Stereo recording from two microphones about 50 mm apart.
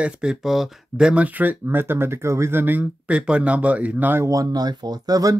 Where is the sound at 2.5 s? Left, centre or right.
Right.